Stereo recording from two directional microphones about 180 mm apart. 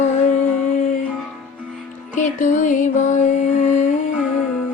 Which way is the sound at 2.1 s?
45° left (ahead or behind).